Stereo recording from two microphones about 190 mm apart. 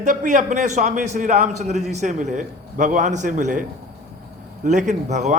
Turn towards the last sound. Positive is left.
turn(degrees=-40)  # may be behind; listen again after turning